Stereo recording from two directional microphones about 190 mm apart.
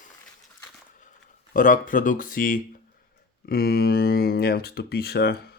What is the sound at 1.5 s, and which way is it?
Speech, 45° left (ahead or behind).